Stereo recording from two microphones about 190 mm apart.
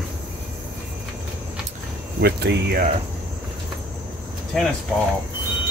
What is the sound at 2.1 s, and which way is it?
Speech, 60° right (ahead or behind).